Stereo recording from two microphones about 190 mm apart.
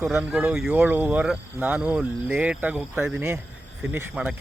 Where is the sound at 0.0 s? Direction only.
5° right (ahead or behind).